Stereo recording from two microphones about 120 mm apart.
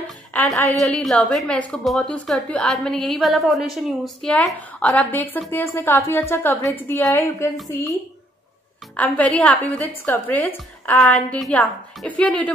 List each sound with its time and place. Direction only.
0.3 s a woman's voice: 5° left (ahead or behind); by 8.0 s 30° left (ahead or behind)
8.9 s a woman's voice: 10° left (ahead or behind)